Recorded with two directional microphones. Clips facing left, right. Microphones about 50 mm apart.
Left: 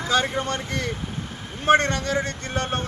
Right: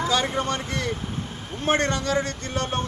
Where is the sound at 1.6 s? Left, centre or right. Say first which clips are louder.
Left 4 dB; left.